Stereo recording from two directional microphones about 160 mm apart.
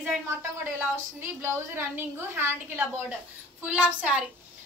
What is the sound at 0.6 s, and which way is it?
A woman's voice, 15° right (ahead or behind).